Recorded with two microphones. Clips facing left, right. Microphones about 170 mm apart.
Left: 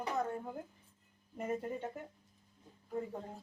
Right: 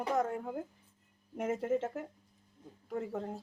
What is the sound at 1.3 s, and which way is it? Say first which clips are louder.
Speech: right 6 dB; 85° right.